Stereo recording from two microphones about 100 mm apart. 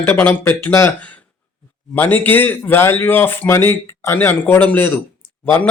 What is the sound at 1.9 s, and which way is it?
Speech, 20° left (ahead or behind).